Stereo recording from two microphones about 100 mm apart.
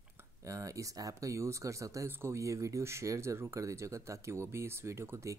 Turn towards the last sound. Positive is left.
turn(degrees=-25)  # may be behind; listen again after turning